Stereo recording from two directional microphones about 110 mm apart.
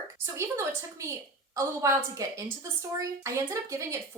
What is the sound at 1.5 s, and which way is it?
A woman's voice, 25° right (ahead or behind).